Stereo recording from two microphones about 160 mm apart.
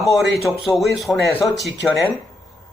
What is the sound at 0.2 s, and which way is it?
Speech, centre (ahead or behind).